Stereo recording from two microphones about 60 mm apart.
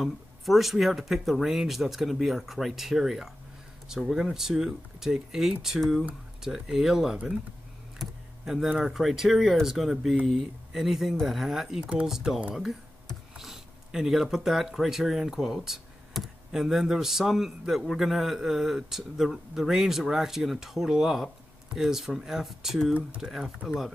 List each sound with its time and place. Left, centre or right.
0.0 s speech: centre
11.8 s speech: centre
12.1 s speech: centre
13.4 s speech: centre